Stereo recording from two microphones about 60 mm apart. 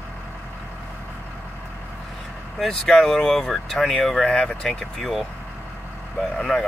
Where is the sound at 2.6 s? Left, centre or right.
Centre.